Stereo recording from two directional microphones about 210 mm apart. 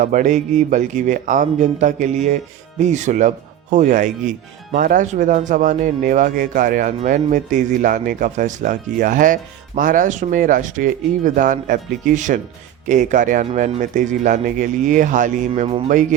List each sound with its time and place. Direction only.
0.0 s speech: 35° right (ahead or behind)